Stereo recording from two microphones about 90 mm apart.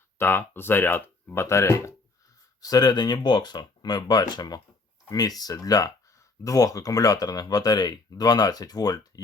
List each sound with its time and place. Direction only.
0.2 s speech: 25° left (ahead or behind)
2.6 s speech: 45° left (ahead or behind)